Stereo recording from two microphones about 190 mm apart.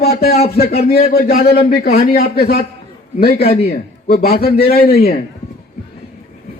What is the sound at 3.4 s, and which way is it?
Speech, 30° left (ahead or behind).